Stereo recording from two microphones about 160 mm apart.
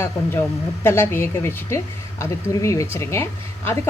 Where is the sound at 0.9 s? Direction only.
15° left (ahead or behind).